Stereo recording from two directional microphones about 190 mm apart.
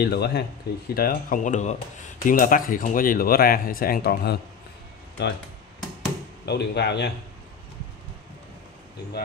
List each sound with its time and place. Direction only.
0.0 s speech: 55° left (ahead or behind)
6.4 s speech: 60° left (ahead or behind)